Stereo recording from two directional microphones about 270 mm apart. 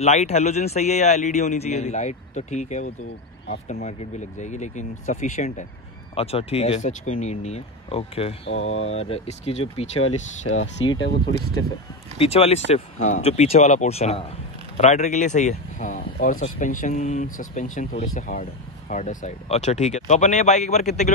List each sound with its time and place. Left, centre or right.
0.0 s speech: left
10.4 s speech: left
12.2 s speech: left